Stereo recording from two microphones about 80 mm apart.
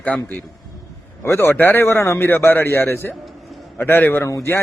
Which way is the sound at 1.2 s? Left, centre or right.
Left.